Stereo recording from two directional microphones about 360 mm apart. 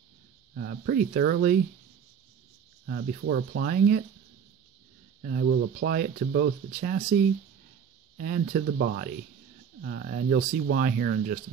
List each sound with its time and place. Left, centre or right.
0.6 s speech: right
2.9 s speech: right
5.2 s speech: right
8.2 s speech: right